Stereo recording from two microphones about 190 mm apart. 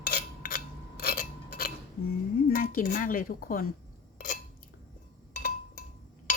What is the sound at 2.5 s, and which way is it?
Speech, 50° left (ahead or behind).